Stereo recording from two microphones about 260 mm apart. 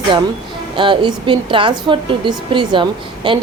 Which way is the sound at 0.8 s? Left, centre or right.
Centre.